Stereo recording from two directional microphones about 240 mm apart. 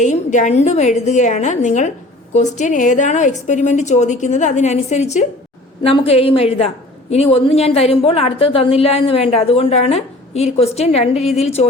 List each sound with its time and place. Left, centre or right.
0.0 s a woman's voice: left